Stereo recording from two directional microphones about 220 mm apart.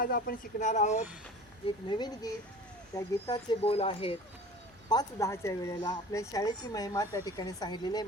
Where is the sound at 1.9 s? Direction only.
20° left (ahead or behind).